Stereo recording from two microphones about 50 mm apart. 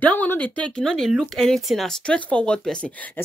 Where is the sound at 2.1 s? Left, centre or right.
Left.